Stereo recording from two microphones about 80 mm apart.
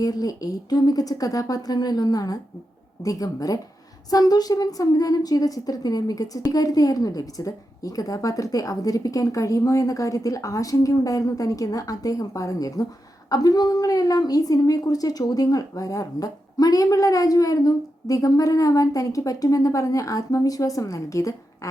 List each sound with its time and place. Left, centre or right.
0.0 s a woman's voice: left